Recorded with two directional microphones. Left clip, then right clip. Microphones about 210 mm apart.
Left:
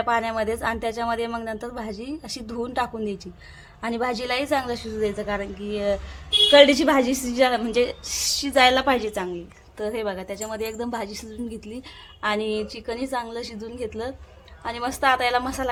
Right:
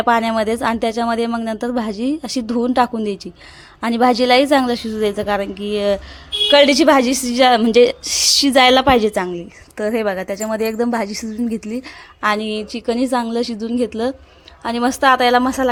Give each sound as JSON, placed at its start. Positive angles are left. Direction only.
{"t": 0.0, "sound": "a woman's voice", "side_deg": -40}